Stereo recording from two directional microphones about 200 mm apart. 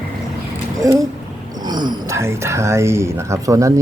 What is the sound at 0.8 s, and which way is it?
Speech, 15° right (ahead or behind).